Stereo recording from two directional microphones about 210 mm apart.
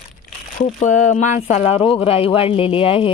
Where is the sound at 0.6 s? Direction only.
35° left (ahead or behind).